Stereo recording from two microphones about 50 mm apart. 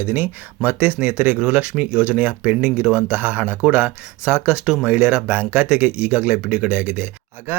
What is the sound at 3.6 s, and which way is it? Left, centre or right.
Speech, right.